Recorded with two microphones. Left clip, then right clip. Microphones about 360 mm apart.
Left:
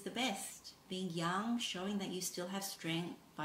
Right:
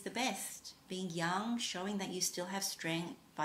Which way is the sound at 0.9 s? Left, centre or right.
Centre.